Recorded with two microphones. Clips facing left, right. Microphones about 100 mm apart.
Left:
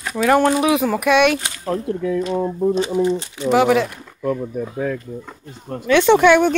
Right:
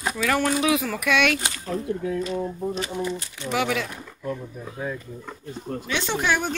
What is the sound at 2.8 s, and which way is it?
Speech, 25° left (ahead or behind).